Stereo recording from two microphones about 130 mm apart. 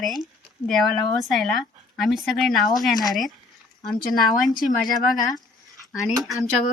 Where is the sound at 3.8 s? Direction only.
Centre (ahead or behind).